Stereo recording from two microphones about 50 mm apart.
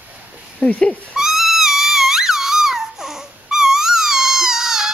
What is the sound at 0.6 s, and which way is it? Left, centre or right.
Speech, left.